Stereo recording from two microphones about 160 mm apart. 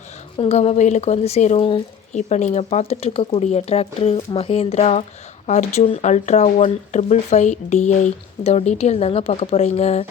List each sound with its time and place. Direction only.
0.3 s a woman's voice: 40° left (ahead or behind)